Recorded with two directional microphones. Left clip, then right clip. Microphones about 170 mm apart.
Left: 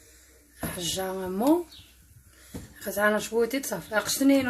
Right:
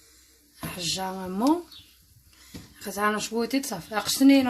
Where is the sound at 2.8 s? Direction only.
65° right (ahead or behind).